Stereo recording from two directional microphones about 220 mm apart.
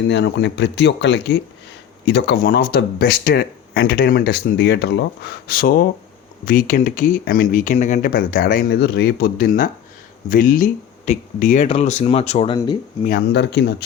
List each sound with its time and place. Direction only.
0.1 s speech: 50° left (ahead or behind); by 12.5 s 30° left (ahead or behind)
13.1 s speech: 45° left (ahead or behind)